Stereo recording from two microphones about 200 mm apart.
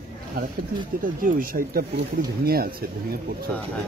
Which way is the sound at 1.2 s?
45° right (ahead or behind).